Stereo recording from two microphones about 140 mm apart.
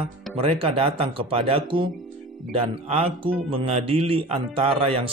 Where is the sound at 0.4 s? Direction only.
40° right (ahead or behind).